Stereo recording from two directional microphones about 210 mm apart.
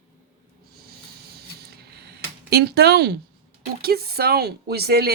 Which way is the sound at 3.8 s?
45° right (ahead or behind).